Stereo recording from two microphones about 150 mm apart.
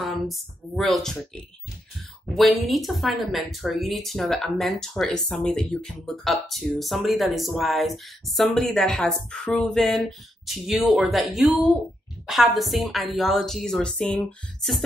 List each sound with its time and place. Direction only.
0.0 s speech: centre (ahead or behind)